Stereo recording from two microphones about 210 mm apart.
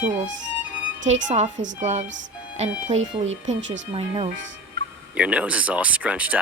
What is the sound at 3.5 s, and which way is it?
Speech, 60° right (ahead or behind).